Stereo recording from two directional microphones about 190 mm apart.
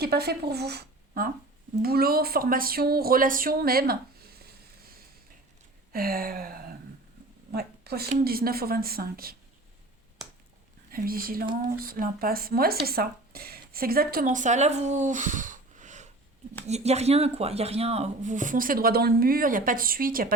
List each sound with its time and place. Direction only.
0.0 s speech: 55° right (ahead or behind)
5.9 s a sound: 50° right (ahead or behind)
7.5 s speech: 55° right (ahead or behind)
10.9 s a woman's voice: 50° right (ahead or behind)